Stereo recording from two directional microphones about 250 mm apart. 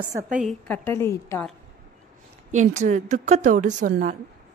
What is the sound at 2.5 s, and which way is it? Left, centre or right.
A woman's voice, right.